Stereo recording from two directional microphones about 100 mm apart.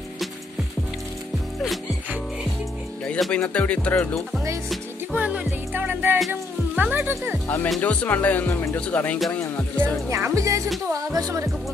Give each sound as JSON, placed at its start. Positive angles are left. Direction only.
{"t": 3.2, "sound": "music", "side_deg": 10}
{"t": 5.1, "sound": "music", "side_deg": -15}
{"t": 6.1, "sound": "music", "side_deg": 0}
{"t": 6.8, "sound": "music", "side_deg": -15}
{"t": 7.4, "sound": "music", "side_deg": 15}
{"t": 8.7, "sound": "music", "side_deg": 15}
{"t": 9.8, "sound": "speech", "side_deg": -25}